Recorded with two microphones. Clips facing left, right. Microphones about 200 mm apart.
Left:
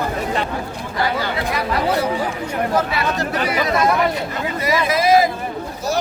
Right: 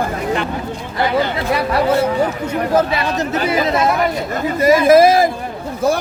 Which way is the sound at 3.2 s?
25° right (ahead or behind).